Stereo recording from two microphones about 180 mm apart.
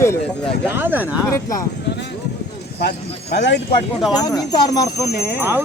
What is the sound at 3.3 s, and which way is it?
Speech, 70° left (ahead or behind).